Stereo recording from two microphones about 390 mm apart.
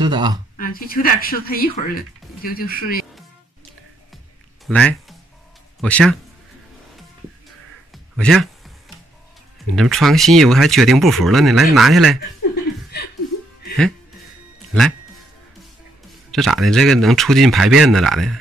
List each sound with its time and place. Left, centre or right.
0.0 s speech: centre
0.6 s speech: left
4.6 s speech: centre
7.9 s a sound: centre
9.8 s speech: centre
12.4 s chuckle: left
14.7 s speech: centre
16.3 s speech: centre